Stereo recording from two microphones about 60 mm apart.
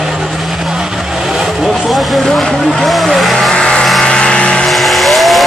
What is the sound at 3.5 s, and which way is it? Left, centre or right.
Vehicle, centre.